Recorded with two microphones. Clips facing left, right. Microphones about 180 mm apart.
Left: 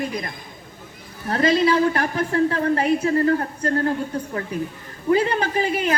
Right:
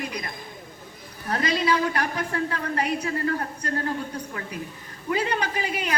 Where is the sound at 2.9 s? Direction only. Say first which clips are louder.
Left 8 dB; 35° left (ahead or behind).